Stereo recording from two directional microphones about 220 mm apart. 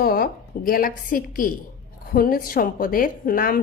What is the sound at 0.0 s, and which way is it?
A woman's voice, 40° left (ahead or behind).